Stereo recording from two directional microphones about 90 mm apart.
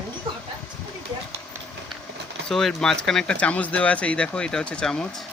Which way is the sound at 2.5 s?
5° left (ahead or behind).